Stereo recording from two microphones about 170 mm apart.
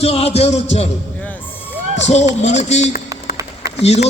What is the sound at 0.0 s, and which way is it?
Speech, 35° left (ahead or behind).